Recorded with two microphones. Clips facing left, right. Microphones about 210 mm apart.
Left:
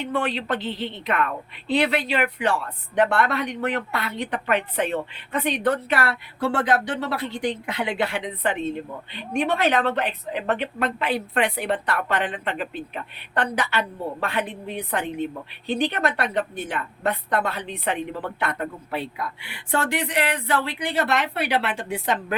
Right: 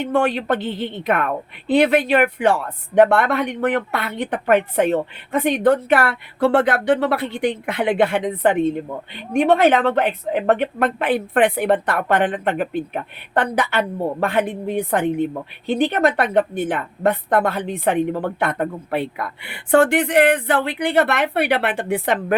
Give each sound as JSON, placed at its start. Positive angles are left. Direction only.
{"t": 0.0, "sound": "a woman's voice", "side_deg": -45}